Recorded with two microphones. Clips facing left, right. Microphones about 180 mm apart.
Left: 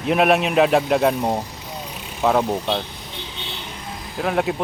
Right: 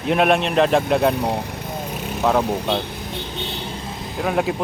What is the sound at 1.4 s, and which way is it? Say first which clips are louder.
Vehicle: right 5 dB; 60° right (ahead or behind).